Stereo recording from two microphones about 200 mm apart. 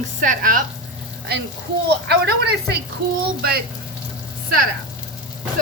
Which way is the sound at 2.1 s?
55° right (ahead or behind).